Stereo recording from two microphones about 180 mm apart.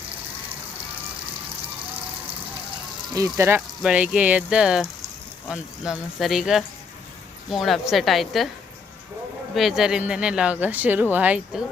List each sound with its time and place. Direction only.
3.3 s speech: 15° right (ahead or behind); by 8.4 s centre (ahead or behind)
9.6 s speech: centre (ahead or behind)